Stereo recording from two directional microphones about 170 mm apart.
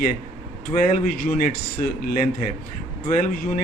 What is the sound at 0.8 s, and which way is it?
Speech, 50° left (ahead or behind).